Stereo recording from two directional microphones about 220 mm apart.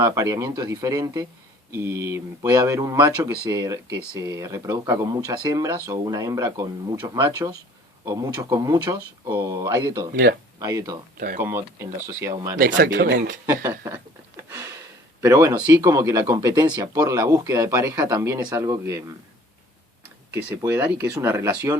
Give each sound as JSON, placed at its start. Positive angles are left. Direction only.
{"t": 0.0, "sound": "speech", "side_deg": -15}
{"t": 12.5, "sound": "speech", "side_deg": -40}
{"t": 13.5, "sound": "speech", "side_deg": -10}
{"t": 15.2, "sound": "speech", "side_deg": -15}
{"t": 20.3, "sound": "speech", "side_deg": -10}